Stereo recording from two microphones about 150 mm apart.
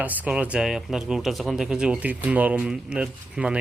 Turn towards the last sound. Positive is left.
turn(degrees=-5)  # may be behind; listen again after turning